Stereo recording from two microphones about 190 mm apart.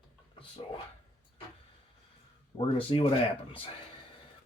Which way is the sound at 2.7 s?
30° left (ahead or behind).